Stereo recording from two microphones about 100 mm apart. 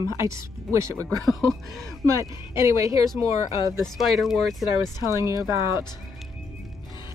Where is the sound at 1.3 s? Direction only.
Centre (ahead or behind).